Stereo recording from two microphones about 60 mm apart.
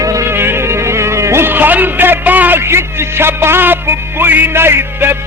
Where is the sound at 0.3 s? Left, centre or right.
Right.